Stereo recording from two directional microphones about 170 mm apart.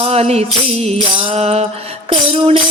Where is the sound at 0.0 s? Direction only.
35° right (ahead or behind).